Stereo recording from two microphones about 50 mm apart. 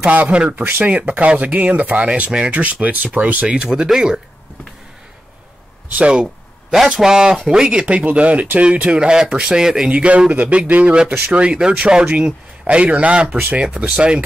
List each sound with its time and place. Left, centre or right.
0.1 s speech: right
3.5 s speech: centre
6.2 s a sound: centre
6.9 s speech: centre
8.9 s speech: centre
9.8 s speech: right
11.1 s speech: right
11.5 s speech: centre